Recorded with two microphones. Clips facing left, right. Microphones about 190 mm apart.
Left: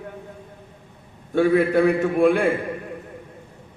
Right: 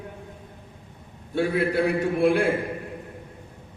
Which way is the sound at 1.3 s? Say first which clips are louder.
Left 6 dB; 50° left (ahead or behind).